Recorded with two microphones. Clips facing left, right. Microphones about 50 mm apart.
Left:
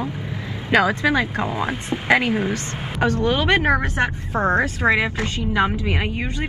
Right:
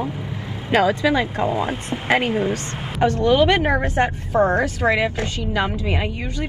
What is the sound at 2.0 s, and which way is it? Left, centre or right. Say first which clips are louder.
Speech: left 1 dB; left.